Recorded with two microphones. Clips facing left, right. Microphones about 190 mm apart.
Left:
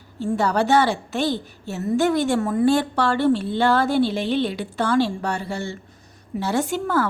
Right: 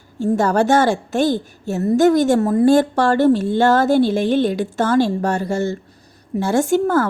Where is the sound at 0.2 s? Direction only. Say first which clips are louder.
Right 5 dB; 45° right (ahead or behind).